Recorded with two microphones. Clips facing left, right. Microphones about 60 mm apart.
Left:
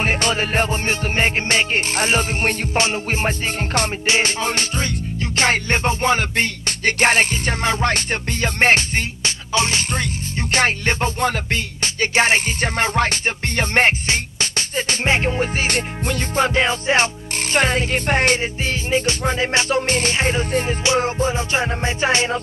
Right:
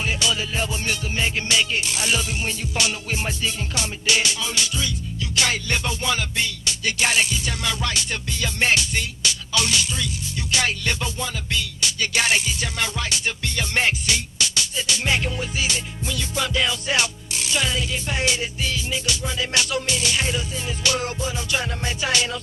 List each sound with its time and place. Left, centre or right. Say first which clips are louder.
0.0 s music: left 5 dB; left